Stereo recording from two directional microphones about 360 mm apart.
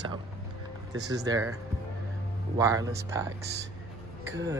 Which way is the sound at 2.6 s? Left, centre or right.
Centre.